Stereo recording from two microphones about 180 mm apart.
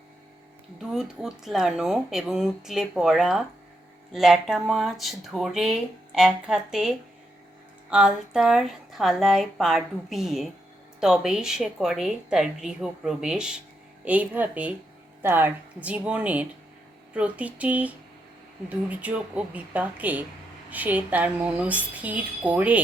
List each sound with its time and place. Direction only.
0.8 s speech: centre (ahead or behind)